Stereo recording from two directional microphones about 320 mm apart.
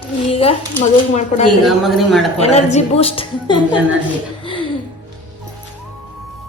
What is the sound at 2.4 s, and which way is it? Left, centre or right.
A woman's voice, centre.